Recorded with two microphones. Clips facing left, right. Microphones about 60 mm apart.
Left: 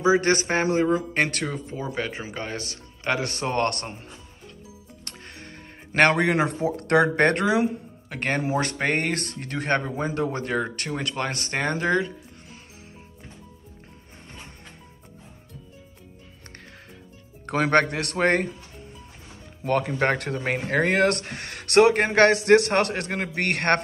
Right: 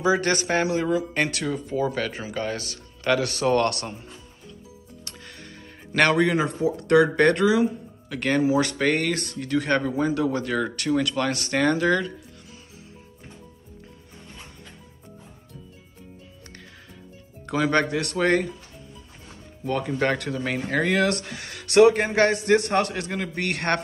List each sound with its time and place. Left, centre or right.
0.0 s speech: left
5.0 s music: left
5.9 s speech: left
6.2 s speech: left
8.1 s speech: left
17.5 s speech: left
19.6 s speech: left
20.0 s speech: left